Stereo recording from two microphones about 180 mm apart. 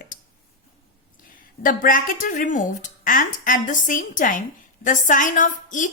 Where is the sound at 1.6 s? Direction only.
50° left (ahead or behind).